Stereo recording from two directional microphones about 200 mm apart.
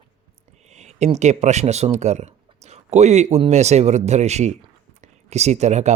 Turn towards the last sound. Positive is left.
turn(degrees=-35)  # may be behind; listen again after turning